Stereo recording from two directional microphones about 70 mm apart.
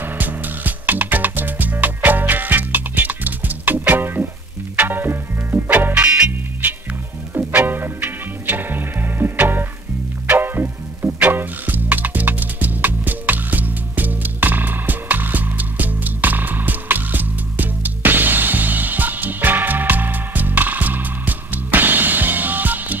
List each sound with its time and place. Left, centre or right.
0.0 s music: right
7.3 s music: right